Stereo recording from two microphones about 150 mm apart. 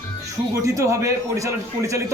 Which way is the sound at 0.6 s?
20° right (ahead or behind).